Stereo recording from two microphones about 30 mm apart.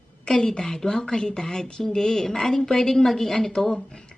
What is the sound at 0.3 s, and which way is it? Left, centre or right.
A woman's voice, left.